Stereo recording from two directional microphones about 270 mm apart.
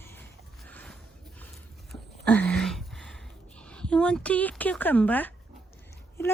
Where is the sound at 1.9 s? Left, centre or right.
Centre.